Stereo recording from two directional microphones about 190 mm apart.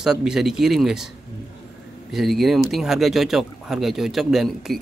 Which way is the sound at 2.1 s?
Centre (ahead or behind).